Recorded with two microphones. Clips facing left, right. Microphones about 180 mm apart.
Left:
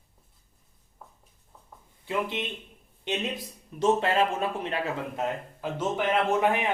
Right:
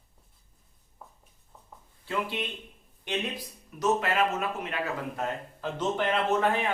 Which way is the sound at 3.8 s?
30° left (ahead or behind).